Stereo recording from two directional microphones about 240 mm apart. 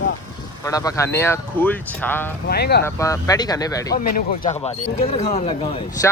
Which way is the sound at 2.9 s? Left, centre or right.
Centre.